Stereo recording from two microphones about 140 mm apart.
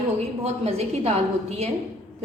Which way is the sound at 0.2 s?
50° right (ahead or behind).